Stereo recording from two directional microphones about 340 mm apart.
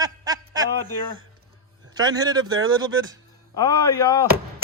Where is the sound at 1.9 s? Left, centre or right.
Centre.